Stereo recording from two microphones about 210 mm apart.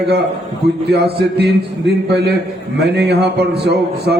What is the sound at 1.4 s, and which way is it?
A man's voice, 55° right (ahead or behind).